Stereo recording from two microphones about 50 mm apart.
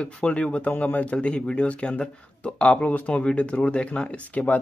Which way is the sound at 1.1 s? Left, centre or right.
Centre.